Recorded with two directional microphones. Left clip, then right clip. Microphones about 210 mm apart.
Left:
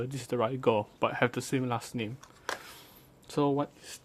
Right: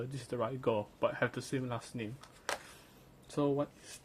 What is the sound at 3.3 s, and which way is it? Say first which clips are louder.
Speech: left 4 dB; 50° left (ahead or behind).